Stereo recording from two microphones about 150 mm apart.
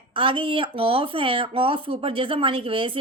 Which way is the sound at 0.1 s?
35° right (ahead or behind).